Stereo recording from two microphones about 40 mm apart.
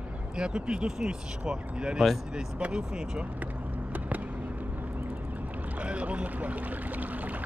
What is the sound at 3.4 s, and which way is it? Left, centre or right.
Vehicle, right.